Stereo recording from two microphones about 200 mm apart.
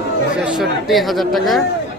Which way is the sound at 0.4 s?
5° right (ahead or behind).